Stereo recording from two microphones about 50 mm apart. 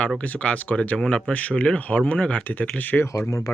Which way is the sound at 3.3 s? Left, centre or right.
Left.